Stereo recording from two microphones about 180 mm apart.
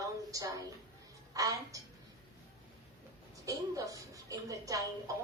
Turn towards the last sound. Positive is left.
turn(degrees=-20)  # may be behind; listen again after turning